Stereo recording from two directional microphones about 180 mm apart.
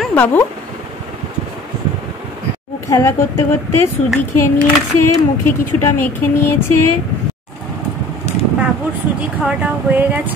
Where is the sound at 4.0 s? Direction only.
40° left (ahead or behind).